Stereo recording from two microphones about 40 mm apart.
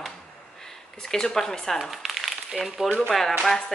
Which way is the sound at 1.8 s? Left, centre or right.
Centre.